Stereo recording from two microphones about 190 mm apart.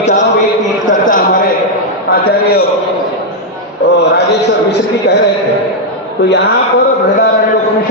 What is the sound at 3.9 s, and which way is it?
Speech, 60° left (ahead or behind).